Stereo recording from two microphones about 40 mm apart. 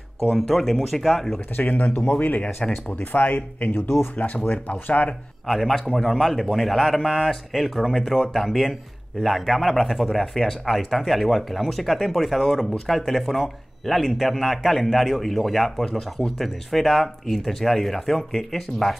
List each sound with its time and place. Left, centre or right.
0.3 s speech: centre
1.6 s speech: left
2.1 s speech: left
2.9 s speech: left
3.8 s speech: left
4.2 s speech: left
5.5 s speech: centre